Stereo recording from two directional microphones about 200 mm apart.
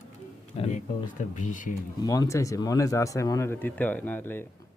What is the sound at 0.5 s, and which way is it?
Speech, 30° left (ahead or behind).